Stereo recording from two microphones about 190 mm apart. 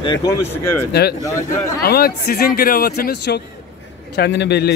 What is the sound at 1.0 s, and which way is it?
A man's voice, 55° left (ahead or behind).